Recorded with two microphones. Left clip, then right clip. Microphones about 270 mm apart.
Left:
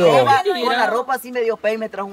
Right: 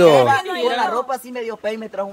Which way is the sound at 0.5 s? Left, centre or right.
Left.